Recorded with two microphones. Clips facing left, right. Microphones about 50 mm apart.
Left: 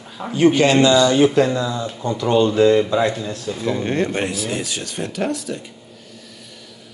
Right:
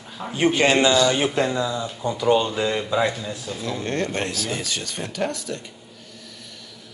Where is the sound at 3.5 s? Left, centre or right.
Centre.